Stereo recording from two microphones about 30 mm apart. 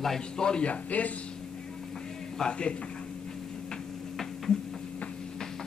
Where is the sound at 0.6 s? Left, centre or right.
Left.